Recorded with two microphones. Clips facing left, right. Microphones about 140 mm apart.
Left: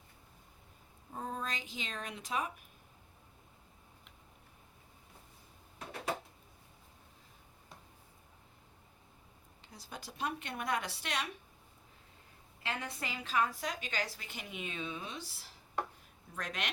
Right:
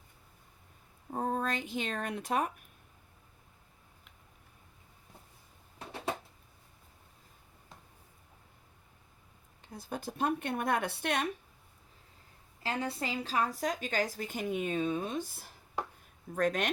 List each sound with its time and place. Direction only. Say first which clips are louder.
1.1 s speech: right 7 dB; 60° right (ahead or behind)
9.7 s a woman's voice: right 9 dB; 50° right (ahead or behind)
12.6 s a woman's voice: right 6 dB; 35° right (ahead or behind)